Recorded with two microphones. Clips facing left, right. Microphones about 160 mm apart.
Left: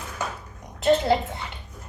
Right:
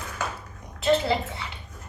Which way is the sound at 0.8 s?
50° left (ahead or behind).